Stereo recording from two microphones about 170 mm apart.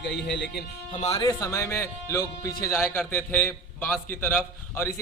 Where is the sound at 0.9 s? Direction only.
35° left (ahead or behind).